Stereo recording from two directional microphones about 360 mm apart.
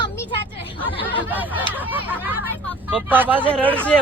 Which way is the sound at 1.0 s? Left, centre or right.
Centre.